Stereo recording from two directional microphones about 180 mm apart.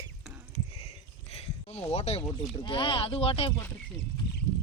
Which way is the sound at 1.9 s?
35° left (ahead or behind).